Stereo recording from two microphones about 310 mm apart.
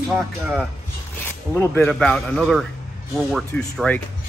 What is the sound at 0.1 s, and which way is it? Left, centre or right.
Speech, centre.